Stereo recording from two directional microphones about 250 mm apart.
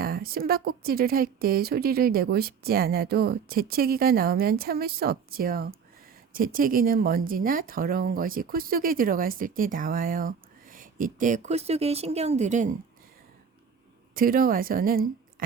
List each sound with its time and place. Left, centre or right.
0.0 s a woman's voice: right
14.2 s a woman's voice: right